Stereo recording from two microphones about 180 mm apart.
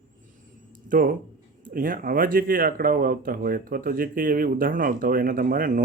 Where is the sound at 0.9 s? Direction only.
55° right (ahead or behind).